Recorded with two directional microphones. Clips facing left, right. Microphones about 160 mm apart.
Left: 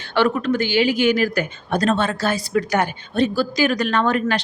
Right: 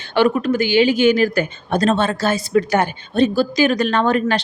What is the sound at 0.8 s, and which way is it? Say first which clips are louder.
A woman's voice: right 4 dB; 25° right (ahead or behind).